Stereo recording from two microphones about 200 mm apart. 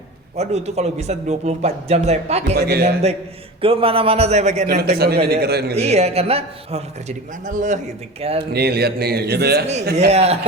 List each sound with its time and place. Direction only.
0.3 s a man's voice: 35° right (ahead or behind)
2.6 s a man's voice: 55° right (ahead or behind)
3.6 s a man's voice: 30° right (ahead or behind)
4.6 s a man's voice: 55° right (ahead or behind)
5.7 s a man's voice: 30° right (ahead or behind)
8.5 s a man's voice: 50° right (ahead or behind)
10.1 s a man's voice: 30° right (ahead or behind)